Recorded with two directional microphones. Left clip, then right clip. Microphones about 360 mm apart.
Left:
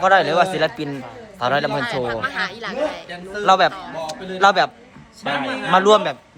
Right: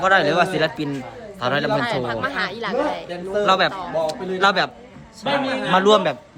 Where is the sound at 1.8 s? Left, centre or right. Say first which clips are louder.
Even; centre.